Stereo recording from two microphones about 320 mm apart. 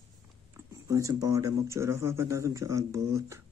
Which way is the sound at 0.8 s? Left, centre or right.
Centre.